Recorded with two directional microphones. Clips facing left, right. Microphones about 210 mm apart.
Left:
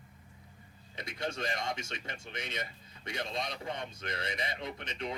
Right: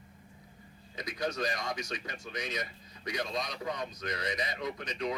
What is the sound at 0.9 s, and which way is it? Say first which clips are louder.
Speech: right 3 dB; 25° left (ahead or behind).